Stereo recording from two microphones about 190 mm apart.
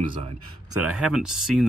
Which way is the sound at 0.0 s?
30° right (ahead or behind).